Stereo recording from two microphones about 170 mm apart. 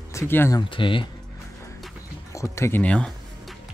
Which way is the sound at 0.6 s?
30° left (ahead or behind).